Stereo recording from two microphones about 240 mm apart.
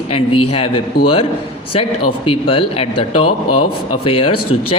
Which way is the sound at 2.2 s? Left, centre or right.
Left.